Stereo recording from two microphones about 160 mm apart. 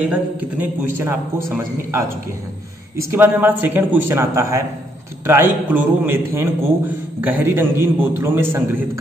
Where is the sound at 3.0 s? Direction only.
15° right (ahead or behind).